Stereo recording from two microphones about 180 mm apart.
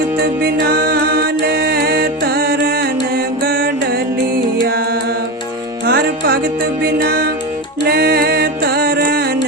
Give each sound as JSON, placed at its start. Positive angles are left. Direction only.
{"t": 0.2, "sound": "music", "side_deg": -60}
{"t": 5.8, "sound": "music", "side_deg": -60}